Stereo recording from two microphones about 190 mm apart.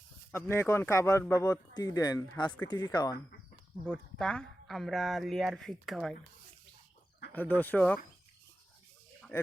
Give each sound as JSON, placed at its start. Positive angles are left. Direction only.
{"t": 0.3, "sound": "speech", "side_deg": 10}
{"t": 3.8, "sound": "speech", "side_deg": 5}
{"t": 7.3, "sound": "speech", "side_deg": 10}